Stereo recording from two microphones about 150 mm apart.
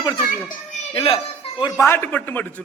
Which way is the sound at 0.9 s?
35° left (ahead or behind).